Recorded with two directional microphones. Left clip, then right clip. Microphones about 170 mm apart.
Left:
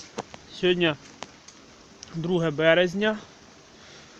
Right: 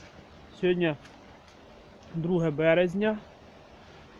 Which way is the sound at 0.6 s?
10° left (ahead or behind).